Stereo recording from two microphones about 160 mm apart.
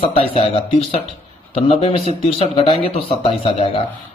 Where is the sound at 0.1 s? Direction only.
40° left (ahead or behind).